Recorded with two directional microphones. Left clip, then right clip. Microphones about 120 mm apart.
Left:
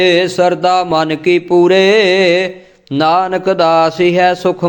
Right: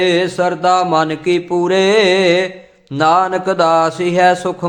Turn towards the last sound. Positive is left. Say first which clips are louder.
# left 1 dB
turn(degrees=20)  # may be behind; listen again after turning